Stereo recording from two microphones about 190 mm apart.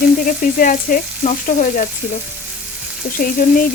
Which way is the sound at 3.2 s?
45° left (ahead or behind).